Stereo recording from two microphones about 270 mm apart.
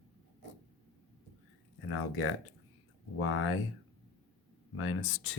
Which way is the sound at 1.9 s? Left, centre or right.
Left.